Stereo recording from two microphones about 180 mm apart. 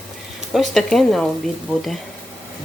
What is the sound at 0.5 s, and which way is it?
Speech, centre (ahead or behind).